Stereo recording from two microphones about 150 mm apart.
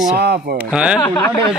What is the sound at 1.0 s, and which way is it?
Speech, 15° left (ahead or behind).